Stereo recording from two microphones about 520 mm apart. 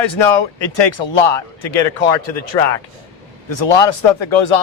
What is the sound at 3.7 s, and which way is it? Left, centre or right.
Speech, left.